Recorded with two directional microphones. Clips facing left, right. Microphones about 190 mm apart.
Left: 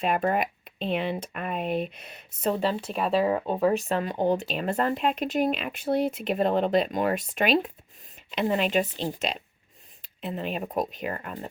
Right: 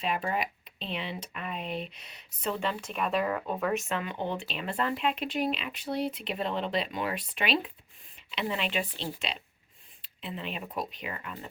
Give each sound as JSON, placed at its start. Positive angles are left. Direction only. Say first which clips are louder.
{"t": 0.0, "sound": "speech", "louder": "left 6 dB", "side_deg": 50}